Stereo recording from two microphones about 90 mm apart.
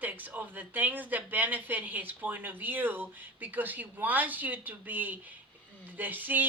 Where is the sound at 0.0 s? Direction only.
20° right (ahead or behind).